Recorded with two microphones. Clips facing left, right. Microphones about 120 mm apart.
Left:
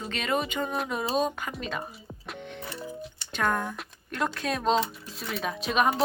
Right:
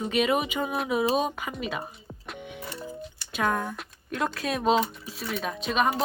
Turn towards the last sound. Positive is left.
turn(degrees=0)  # may be behind; listen again after turning